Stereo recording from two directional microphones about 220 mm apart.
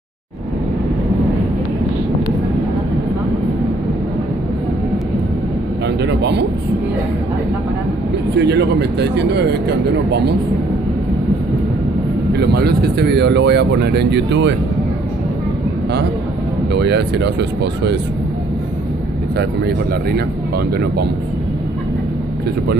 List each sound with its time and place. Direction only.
6.0 s a sound: 50° right (ahead or behind)
8.4 s speech: 50° right (ahead or behind)
12.4 s speech: 50° right (ahead or behind)
16.7 s speech: 50° right (ahead or behind)
19.3 s speech: 45° right (ahead or behind)